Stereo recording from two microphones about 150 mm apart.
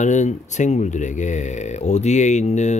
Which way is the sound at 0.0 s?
50° left (ahead or behind).